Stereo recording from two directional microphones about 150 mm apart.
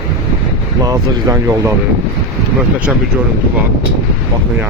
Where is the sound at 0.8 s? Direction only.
25° right (ahead or behind).